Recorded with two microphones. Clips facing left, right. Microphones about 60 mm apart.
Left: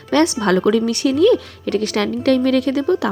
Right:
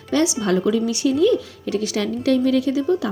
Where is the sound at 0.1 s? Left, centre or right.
Left.